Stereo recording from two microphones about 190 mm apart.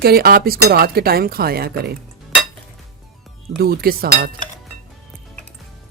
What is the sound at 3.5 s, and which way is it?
Speech, 55° right (ahead or behind).